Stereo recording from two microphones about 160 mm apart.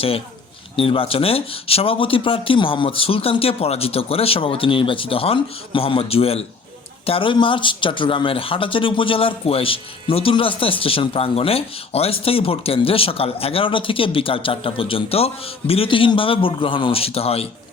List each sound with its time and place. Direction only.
0.8 s speech: 35° left (ahead or behind)